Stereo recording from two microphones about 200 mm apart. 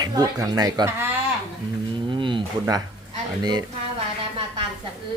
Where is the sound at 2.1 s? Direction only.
25° right (ahead or behind).